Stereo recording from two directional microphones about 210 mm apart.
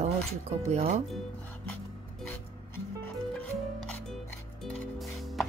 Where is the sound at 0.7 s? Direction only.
30° right (ahead or behind).